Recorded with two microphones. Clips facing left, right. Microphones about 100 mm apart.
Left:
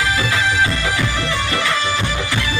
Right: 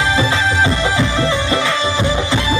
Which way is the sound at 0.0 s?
25° right (ahead or behind).